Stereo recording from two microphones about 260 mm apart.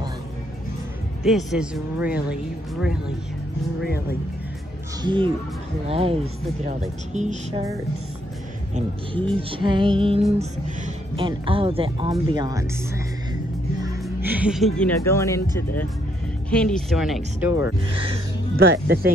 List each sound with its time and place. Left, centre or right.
1.2 s speech: centre
5.0 s speech: centre
9.4 s speech: centre
18.6 s speech: right